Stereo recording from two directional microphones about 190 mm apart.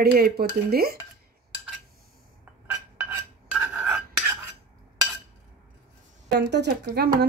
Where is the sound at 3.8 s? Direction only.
5° right (ahead or behind).